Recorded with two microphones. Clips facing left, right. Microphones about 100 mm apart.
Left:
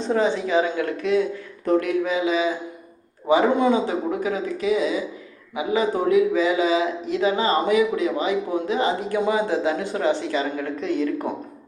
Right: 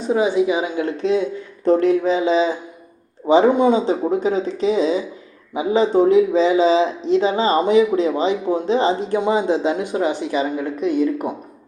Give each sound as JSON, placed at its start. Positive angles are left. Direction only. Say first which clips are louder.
{"t": 0.0, "sound": "a man's voice", "louder": "right 4 dB", "side_deg": -10}